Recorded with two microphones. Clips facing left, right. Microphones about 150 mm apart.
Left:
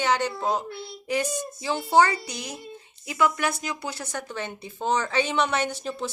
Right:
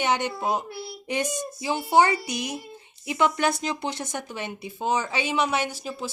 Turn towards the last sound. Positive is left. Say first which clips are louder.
# left 1 dB
turn(degrees=-5)  # may be behind; listen again after turning